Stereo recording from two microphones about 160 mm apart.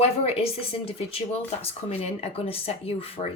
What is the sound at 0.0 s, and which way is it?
Speech, 40° left (ahead or behind).